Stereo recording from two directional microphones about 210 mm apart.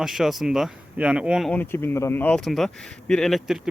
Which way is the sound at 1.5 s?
10° left (ahead or behind).